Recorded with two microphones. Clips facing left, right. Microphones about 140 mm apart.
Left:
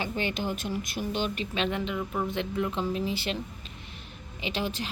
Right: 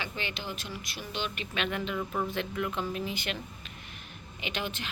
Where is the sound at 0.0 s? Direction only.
45° left (ahead or behind).